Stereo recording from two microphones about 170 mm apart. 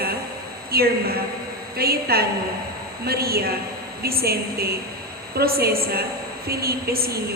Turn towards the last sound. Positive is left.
turn(degrees=-65)  # may be behind; listen again after turning